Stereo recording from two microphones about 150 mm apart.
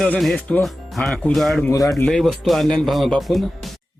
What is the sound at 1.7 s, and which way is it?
Speech, 20° left (ahead or behind).